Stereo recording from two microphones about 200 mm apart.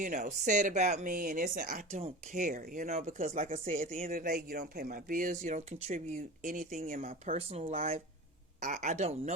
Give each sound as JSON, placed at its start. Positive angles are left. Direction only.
{"t": 0.0, "sound": "speech", "side_deg": -40}
{"t": 7.3, "sound": "speech", "side_deg": -30}